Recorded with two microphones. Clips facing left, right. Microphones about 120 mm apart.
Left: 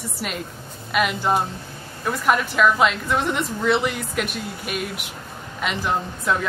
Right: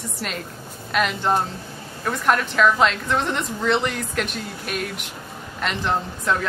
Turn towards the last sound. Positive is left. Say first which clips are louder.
# even
turn(degrees=5)  # may be behind; listen again after turning